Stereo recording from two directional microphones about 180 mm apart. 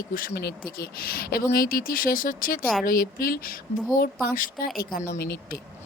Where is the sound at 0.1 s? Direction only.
55° left (ahead or behind).